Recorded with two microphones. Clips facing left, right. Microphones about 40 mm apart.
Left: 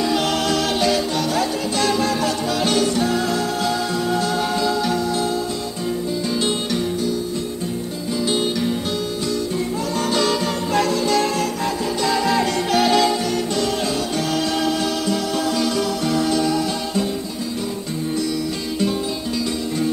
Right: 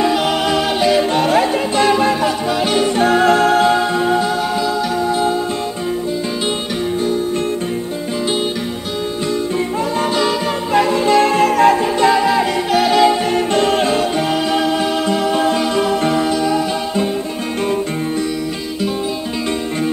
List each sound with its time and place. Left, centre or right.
0.1 s music: centre
1.1 s music: right
3.0 s music: right
10.1 s music: centre
11.0 s music: right
11.5 s music: right
12.1 s music: centre
13.0 s music: right
13.6 s music: right
14.3 s music: right
16.3 s music: centre